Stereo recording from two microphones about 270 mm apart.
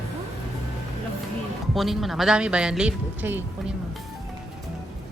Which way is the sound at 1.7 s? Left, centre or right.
Centre.